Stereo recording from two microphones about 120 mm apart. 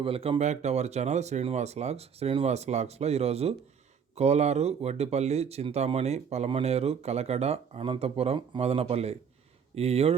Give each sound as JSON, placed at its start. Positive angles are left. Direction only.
{"t": 0.0, "sound": "speech", "side_deg": -50}